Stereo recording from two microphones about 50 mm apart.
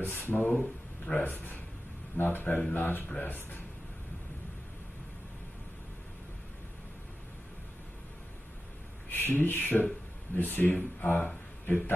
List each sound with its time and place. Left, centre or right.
0.1 s speech: left
0.5 s speech: centre
1.1 s speech: left
9.1 s a man's voice: left